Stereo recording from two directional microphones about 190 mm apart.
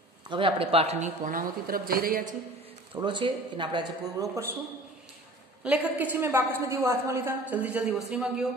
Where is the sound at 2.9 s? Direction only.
25° right (ahead or behind).